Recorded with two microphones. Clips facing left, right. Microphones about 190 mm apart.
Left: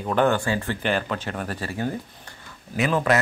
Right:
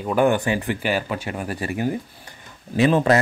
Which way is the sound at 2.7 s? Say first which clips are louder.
Right 5 dB; 30° right (ahead or behind).